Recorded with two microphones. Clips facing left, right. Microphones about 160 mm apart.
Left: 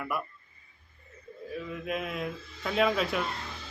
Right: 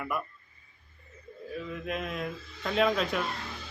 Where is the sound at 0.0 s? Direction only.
5° left (ahead or behind).